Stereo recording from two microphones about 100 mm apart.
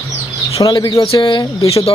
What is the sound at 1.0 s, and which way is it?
Speech, 60° left (ahead or behind).